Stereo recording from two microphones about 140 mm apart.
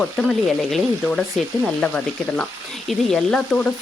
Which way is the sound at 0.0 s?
Centre (ahead or behind).